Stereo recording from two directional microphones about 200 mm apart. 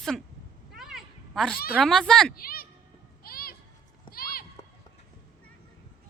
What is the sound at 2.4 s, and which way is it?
Speech, 45° left (ahead or behind).